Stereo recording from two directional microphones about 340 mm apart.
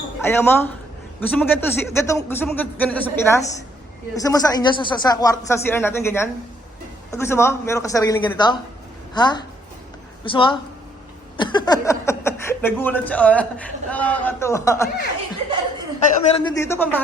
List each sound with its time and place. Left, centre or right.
0.2 s speech: centre
16.0 s speech: centre